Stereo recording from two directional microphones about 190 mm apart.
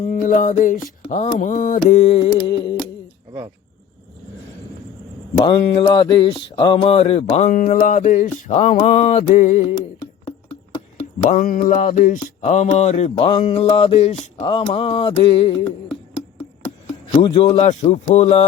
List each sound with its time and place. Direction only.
0.0 s music: 45° left (ahead or behind)
1.9 s music: 35° left (ahead or behind)
5.4 s mantra: 30° left (ahead or behind)
11.3 s mantra: 45° left (ahead or behind)
17.1 s music: 30° left (ahead or behind)
17.8 s mantra: 35° left (ahead or behind)